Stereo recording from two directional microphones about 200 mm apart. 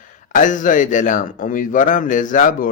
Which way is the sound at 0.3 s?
40° left (ahead or behind).